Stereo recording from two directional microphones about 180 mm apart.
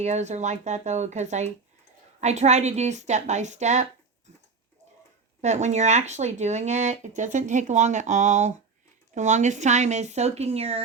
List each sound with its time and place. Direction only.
0.0 s speech: 40° right (ahead or behind)
5.4 s speech: 40° right (ahead or behind)